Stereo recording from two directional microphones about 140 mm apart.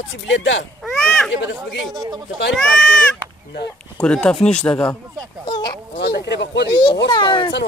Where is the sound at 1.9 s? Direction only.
30° right (ahead or behind).